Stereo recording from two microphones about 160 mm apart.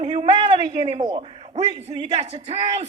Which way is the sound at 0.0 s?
40° right (ahead or behind).